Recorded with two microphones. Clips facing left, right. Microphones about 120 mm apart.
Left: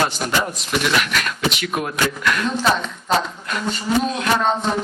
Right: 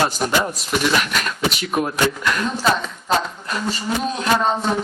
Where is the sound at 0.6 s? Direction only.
Centre (ahead or behind).